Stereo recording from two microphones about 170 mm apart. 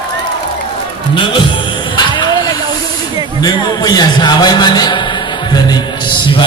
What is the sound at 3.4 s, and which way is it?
A man's voice, 20° left (ahead or behind).